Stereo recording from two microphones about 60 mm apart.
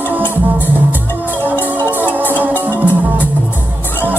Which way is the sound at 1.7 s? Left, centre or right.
Right.